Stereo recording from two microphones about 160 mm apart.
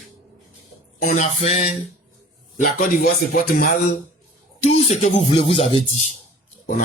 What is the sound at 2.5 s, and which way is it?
Speech, 60° left (ahead or behind).